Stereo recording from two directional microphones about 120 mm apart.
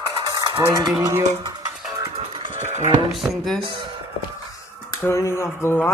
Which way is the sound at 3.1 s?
Centre (ahead or behind).